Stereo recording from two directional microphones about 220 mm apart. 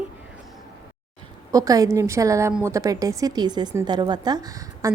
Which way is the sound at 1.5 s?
15° right (ahead or behind).